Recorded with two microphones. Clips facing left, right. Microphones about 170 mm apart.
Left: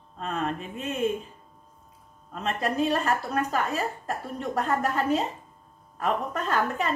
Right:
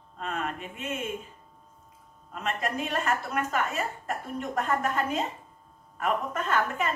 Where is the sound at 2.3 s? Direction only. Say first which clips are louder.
Left 3 dB; 35° left (ahead or behind).